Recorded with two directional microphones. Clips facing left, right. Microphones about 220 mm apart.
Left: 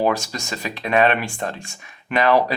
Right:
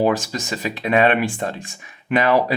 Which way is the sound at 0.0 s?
15° right (ahead or behind).